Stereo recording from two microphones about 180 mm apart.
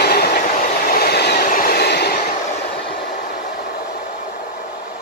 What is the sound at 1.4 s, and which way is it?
Train, 50° left (ahead or behind).